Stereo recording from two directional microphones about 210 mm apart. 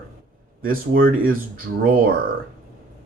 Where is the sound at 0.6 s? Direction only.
45° right (ahead or behind).